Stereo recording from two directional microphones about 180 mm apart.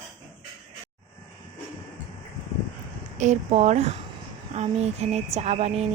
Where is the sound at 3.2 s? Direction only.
40° right (ahead or behind).